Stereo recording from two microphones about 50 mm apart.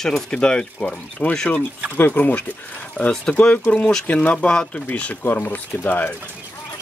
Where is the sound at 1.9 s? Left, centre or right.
Left.